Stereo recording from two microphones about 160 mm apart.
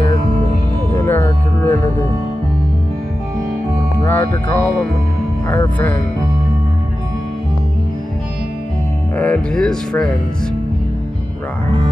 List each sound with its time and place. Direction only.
0.9 s music: 15° left (ahead or behind)
4.0 s music: 15° left (ahead or behind)
5.5 s speech: 10° left (ahead or behind)
9.1 s speech: 10° left (ahead or behind)